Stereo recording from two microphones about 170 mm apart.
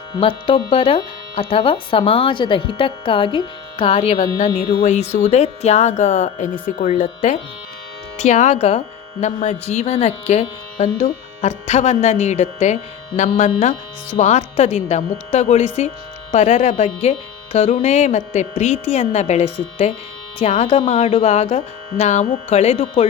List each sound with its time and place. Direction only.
0.2 s speech: 30° left (ahead or behind)